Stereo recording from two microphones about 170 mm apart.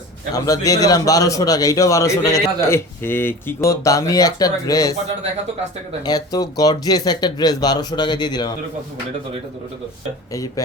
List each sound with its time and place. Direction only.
0.3 s a man's voice: 20° left (ahead or behind)
6.0 s a man's voice: 25° left (ahead or behind)
10.3 s a man's voice: 20° left (ahead or behind)